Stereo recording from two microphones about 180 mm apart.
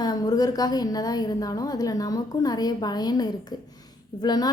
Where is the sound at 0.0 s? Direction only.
20° left (ahead or behind).